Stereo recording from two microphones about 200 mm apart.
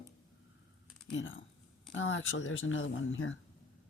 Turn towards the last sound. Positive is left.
turn(degrees=80)